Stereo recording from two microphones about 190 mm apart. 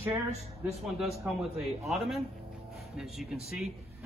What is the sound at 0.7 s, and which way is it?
Speech, centre (ahead or behind).